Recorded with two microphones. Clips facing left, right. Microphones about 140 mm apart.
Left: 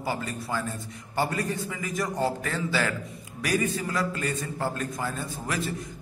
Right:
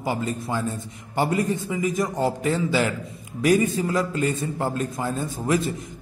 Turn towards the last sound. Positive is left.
turn(degrees=-20)  # may be behind; listen again after turning